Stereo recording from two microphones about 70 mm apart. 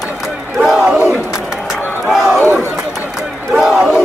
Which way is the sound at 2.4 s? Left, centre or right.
Right.